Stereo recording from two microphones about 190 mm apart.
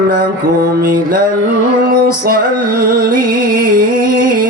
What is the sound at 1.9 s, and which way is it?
Music, 50° right (ahead or behind).